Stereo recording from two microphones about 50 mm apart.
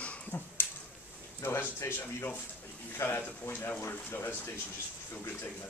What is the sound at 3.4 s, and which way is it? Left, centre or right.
Speech, left.